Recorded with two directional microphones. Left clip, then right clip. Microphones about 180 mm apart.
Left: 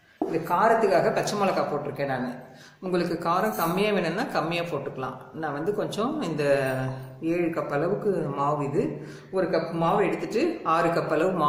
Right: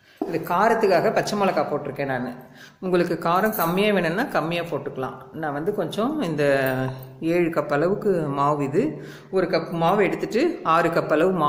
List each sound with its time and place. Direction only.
0.3 s speech: 50° right (ahead or behind)